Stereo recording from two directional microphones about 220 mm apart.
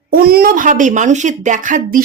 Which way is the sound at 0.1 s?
40° right (ahead or behind).